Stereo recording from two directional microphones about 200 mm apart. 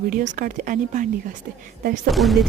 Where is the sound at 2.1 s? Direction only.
Centre (ahead or behind).